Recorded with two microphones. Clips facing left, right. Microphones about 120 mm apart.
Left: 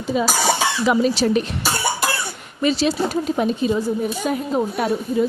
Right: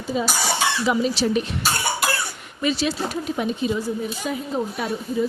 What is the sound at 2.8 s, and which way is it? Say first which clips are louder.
Speech: left 5 dB; 35° left (ahead or behind).